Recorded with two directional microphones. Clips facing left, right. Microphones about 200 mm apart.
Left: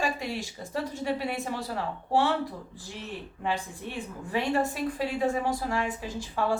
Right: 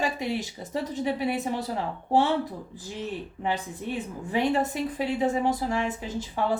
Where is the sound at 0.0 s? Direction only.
20° right (ahead or behind).